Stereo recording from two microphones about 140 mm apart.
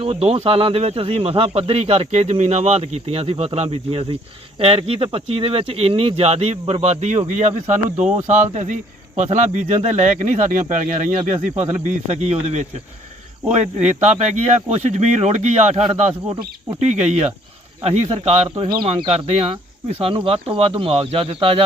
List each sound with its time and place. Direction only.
0.0 s speech: 45° right (ahead or behind); by 10.9 s 65° right (ahead or behind)
11.9 s speech: 55° right (ahead or behind)
15.8 s speech: 35° right (ahead or behind)
16.8 s speech: 55° right (ahead or behind)
18.4 s speech: 35° right (ahead or behind)